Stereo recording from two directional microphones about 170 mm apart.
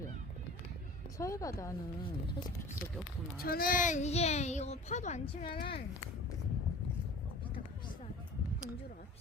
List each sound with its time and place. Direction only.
1.2 s speech: 20° left (ahead or behind)
3.4 s speech: 60° left (ahead or behind); by 6.1 s 35° left (ahead or behind)